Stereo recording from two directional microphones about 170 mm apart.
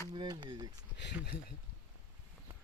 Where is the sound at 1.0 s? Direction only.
90° left.